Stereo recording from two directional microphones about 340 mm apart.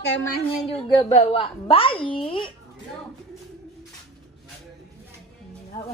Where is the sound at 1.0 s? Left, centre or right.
Centre.